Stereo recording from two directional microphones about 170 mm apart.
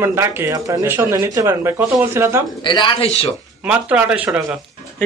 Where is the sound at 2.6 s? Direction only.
30° left (ahead or behind).